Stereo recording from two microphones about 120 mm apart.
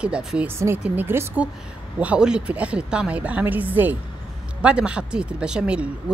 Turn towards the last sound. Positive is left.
turn(degrees=-10)  # may be behind; listen again after turning